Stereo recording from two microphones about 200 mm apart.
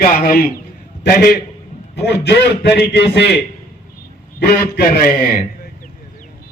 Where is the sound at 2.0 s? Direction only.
55° left (ahead or behind).